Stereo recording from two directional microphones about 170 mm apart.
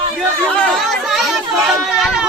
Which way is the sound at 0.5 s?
5° left (ahead or behind).